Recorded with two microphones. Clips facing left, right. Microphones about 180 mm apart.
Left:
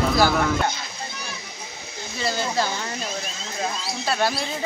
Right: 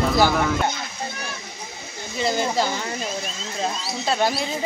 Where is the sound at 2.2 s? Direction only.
20° right (ahead or behind).